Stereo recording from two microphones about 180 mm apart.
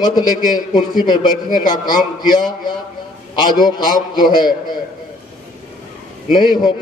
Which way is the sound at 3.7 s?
25° left (ahead or behind).